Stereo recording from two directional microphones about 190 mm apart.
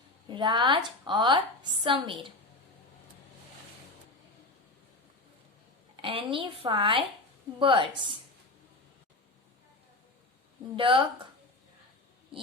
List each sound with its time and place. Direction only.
0.3 s speech: 25° right (ahead or behind)
6.0 s speech: 30° right (ahead or behind)
10.8 s speech: 25° right (ahead or behind)